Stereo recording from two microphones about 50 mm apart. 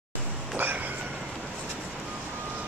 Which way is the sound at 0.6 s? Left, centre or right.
Right.